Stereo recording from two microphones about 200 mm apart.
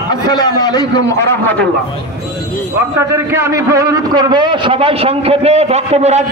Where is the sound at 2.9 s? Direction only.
15° right (ahead or behind).